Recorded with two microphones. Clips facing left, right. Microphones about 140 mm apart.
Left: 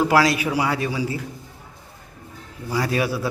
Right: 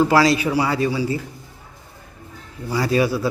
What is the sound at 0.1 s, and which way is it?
Speech, 10° left (ahead or behind).